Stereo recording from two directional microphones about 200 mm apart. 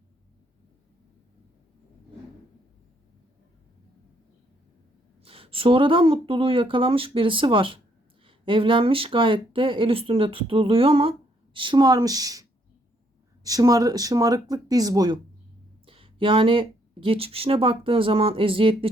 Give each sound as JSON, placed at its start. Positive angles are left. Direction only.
{"t": 5.2, "sound": "speech", "side_deg": -30}